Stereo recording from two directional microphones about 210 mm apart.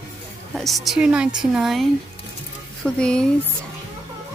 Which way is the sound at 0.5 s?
Centre (ahead or behind).